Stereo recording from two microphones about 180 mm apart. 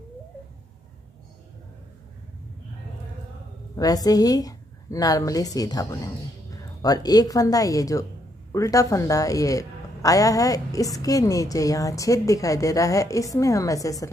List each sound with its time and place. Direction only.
3.7 s a woman's voice: 20° left (ahead or behind)